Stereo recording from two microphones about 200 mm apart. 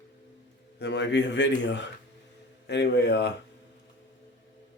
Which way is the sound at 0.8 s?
60° left (ahead or behind).